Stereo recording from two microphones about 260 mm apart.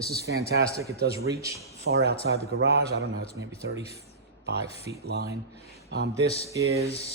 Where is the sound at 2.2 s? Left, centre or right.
Right.